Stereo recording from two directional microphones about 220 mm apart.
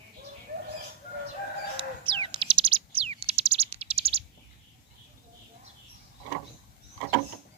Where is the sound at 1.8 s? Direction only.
25° right (ahead or behind).